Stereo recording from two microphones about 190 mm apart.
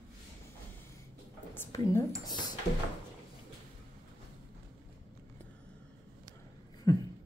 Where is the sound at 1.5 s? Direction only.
15° left (ahead or behind).